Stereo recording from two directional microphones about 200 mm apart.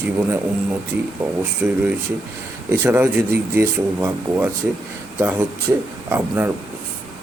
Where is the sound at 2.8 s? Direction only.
10° right (ahead or behind).